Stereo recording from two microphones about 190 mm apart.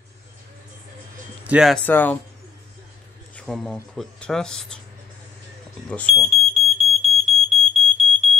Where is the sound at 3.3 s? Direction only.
Centre (ahead or behind).